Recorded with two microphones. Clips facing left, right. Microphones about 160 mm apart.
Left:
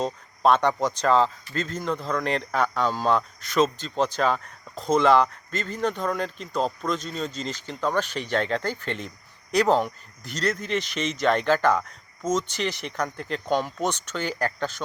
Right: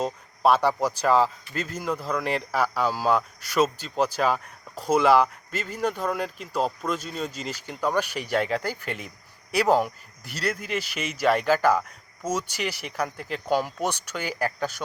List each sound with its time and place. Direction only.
0.0 s speech: 5° right (ahead or behind)